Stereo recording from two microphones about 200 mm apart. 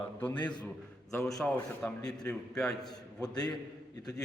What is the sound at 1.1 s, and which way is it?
Speech, 5° left (ahead or behind).